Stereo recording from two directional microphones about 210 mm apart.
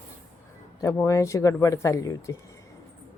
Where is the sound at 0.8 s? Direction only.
15° left (ahead or behind).